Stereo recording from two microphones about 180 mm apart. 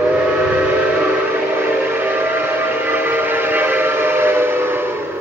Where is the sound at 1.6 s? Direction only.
10° right (ahead or behind).